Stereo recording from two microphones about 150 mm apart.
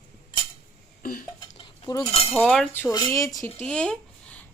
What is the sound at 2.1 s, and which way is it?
Speech, 40° left (ahead or behind).